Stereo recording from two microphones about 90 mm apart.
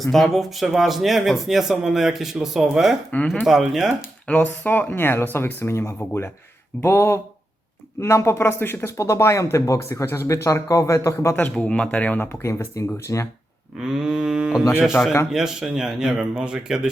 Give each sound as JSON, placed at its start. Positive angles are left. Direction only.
{"t": 0.0, "sound": "a man's voice", "side_deg": 0}
{"t": 4.3, "sound": "speech", "side_deg": 15}
{"t": 11.5, "sound": "speech", "side_deg": 15}
{"t": 12.5, "sound": "speech", "side_deg": 35}
{"t": 13.7, "sound": "speech", "side_deg": -5}
{"t": 15.0, "sound": "speech", "side_deg": 25}
{"t": 15.3, "sound": "speech", "side_deg": -5}